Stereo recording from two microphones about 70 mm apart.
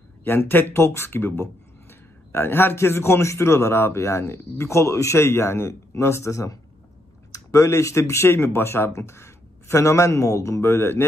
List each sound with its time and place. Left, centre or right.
0.2 s speech: left